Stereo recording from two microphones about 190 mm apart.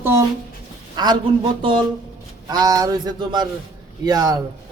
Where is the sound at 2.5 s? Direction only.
20° right (ahead or behind).